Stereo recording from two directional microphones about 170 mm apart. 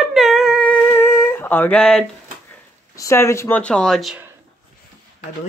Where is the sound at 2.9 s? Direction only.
15° left (ahead or behind); by 4.2 s centre (ahead or behind).